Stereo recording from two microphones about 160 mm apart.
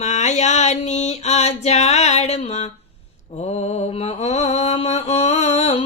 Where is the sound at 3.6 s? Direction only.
45° left (ahead or behind).